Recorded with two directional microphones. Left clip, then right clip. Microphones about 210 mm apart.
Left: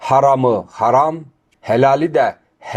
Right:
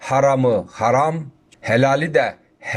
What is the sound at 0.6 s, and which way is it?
Speech, centre (ahead or behind).